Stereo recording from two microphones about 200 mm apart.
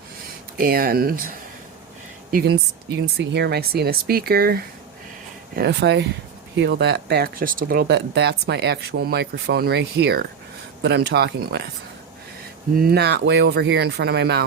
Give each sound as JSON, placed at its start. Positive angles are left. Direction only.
{"t": 0.5, "sound": "speech", "side_deg": -45}
{"t": 2.3, "sound": "speech", "side_deg": -55}
{"t": 12.7, "sound": "speech", "side_deg": -50}